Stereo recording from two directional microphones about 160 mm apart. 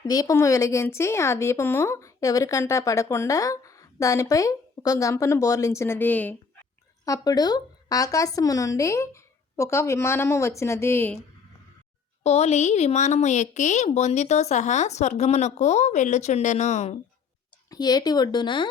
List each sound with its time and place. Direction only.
0.0 s speech: 25° left (ahead or behind)
7.0 s speech: 20° left (ahead or behind)
12.2 s a woman's voice: 45° left (ahead or behind)
17.7 s speech: 25° left (ahead or behind)